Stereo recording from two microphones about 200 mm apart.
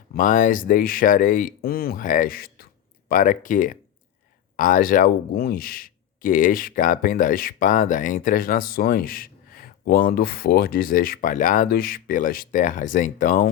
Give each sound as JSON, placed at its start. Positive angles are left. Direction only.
{"t": 0.1, "sound": "speech", "side_deg": 40}